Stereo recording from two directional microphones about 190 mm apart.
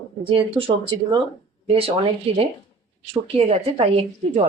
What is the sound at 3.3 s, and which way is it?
A woman's voice, 30° right (ahead or behind).